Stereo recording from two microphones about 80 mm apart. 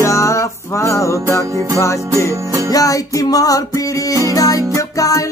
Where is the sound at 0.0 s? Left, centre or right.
Left.